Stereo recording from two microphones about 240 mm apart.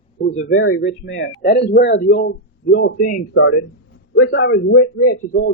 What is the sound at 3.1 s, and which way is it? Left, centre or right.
Speech, left.